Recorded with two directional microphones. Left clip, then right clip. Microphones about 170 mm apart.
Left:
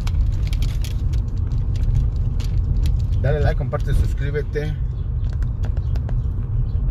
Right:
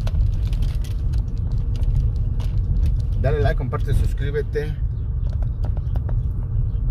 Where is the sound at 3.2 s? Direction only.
35° right (ahead or behind).